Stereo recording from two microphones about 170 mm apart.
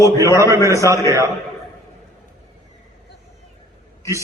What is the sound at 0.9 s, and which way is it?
Speech, 15° right (ahead or behind).